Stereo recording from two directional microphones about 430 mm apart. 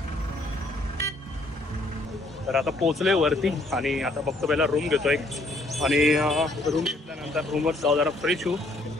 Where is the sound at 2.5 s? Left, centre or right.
Centre.